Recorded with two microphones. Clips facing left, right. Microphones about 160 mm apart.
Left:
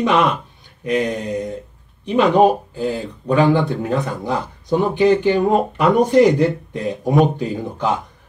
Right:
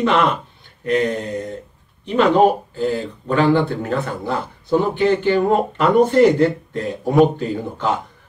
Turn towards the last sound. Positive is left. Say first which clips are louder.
# even
turn(degrees=15)  # may be behind; listen again after turning